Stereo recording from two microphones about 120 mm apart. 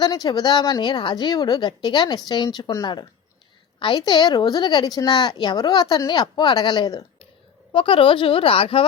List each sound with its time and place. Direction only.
0.0 s a woman's voice: 35° left (ahead or behind)